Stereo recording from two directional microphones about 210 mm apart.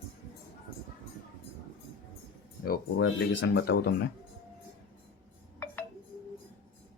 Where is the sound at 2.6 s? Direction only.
50° left (ahead or behind).